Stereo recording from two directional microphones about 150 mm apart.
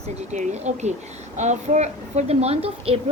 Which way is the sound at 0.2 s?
50° right (ahead or behind).